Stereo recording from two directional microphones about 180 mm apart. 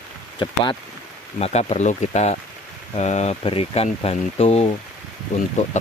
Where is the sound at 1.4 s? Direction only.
35° left (ahead or behind).